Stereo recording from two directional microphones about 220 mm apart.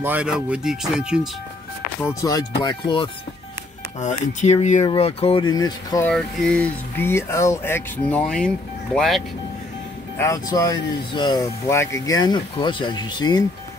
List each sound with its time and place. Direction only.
0.0 s speech: 5° right (ahead or behind)
2.0 s speech: 15° left (ahead or behind)
4.3 s speech: 30° left (ahead or behind)
6.0 s speech: 5° left (ahead or behind)
10.1 s speech: 15° left (ahead or behind)